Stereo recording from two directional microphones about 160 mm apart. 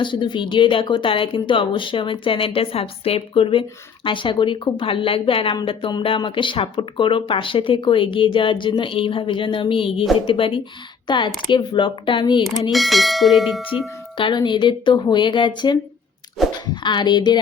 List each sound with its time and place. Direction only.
0.0 s speech: 30° left (ahead or behind)
12.7 s speech: centre (ahead or behind)
14.2 s speech: 30° left (ahead or behind)
16.4 s a sound: centre (ahead or behind)
16.8 s speech: 30° left (ahead or behind)